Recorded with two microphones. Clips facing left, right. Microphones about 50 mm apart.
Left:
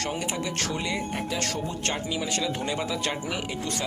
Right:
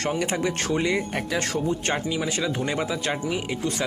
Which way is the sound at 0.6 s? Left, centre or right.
Right.